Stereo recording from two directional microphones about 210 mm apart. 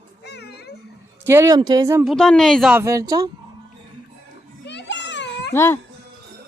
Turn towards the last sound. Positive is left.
turn(degrees=10)  # may be behind; listen again after turning